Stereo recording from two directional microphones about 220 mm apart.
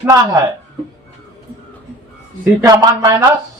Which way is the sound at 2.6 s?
15° right (ahead or behind).